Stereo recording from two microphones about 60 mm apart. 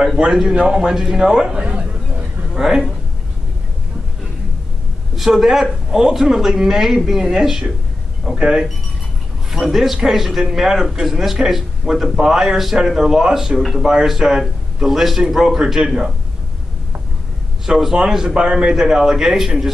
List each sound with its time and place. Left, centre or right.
0.2 s a man's voice: centre
5.1 s a man's voice: centre
9.5 s a man's voice: centre
17.6 s a man's voice: centre